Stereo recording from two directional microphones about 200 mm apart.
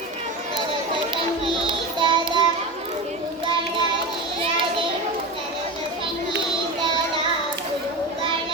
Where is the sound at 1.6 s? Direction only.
25° right (ahead or behind).